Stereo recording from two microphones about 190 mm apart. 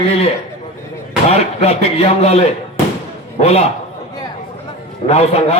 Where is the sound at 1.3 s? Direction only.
30° left (ahead or behind).